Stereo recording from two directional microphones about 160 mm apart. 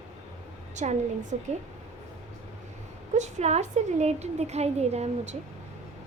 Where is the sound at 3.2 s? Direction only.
45° right (ahead or behind).